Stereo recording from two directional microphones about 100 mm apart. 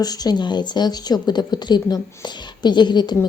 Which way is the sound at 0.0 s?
40° left (ahead or behind).